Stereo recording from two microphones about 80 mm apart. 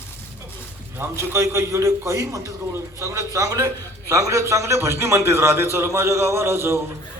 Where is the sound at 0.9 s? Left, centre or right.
Right.